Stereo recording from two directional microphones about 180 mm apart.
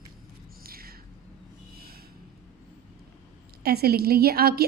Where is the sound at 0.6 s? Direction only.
55° right (ahead or behind).